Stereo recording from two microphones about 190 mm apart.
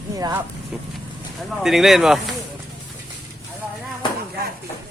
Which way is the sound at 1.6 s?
Centre (ahead or behind).